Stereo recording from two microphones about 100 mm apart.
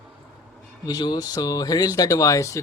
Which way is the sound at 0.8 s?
45° left (ahead or behind).